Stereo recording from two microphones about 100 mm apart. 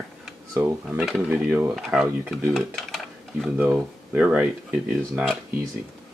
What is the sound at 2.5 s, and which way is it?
Dishes, 5° left (ahead or behind).